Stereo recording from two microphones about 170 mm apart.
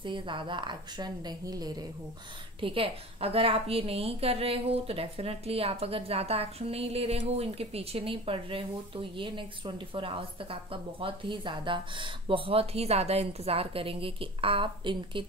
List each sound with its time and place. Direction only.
0.0 s a woman's voice: 30° right (ahead or behind)